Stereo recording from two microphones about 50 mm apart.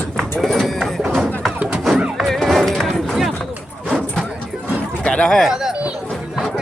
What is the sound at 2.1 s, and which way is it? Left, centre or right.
Music, centre.